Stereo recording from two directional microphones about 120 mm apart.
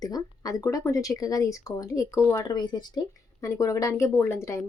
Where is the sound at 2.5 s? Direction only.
35° left (ahead or behind).